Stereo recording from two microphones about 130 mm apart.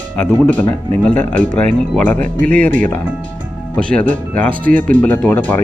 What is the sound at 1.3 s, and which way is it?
Speech, 80° right.